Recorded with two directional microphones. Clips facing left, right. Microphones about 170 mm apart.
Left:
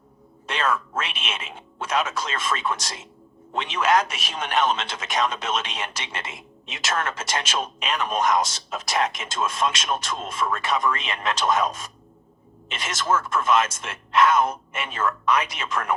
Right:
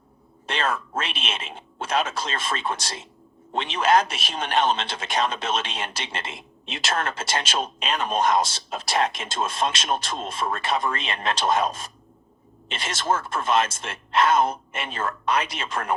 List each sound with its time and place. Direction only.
0.4 s a man's voice: 30° right (ahead or behind)